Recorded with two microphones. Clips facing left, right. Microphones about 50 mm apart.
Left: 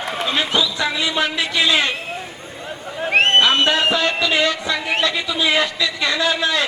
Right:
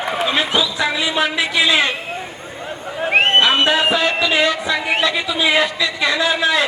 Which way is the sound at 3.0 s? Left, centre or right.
Centre.